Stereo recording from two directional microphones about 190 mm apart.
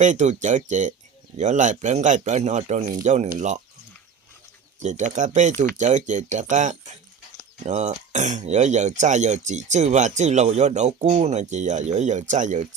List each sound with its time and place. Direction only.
0.0 s speech: 40° right (ahead or behind)
4.8 s speech: 40° right (ahead or behind)